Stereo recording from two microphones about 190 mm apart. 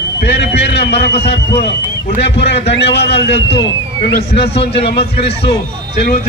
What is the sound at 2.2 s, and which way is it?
A man's voice, 65° left (ahead or behind).